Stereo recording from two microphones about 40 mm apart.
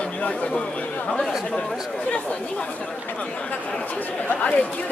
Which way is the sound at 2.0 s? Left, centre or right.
Left.